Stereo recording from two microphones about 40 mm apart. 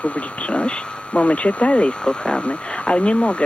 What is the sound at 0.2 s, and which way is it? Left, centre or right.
Speech, left.